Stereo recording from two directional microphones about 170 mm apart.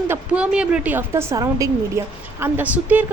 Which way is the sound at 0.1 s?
5° right (ahead or behind).